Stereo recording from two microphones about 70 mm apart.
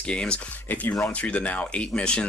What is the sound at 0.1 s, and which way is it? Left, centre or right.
Speech, centre.